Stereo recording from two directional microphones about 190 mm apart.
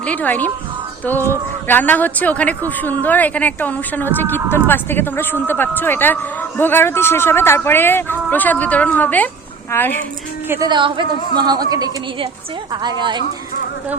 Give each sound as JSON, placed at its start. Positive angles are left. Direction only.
{"t": 0.0, "sound": "speech", "side_deg": 10}
{"t": 1.6, "sound": "speech", "side_deg": 10}
{"t": 10.5, "sound": "a woman's voice", "side_deg": -20}